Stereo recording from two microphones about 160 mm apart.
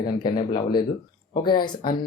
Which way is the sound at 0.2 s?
30° left (ahead or behind).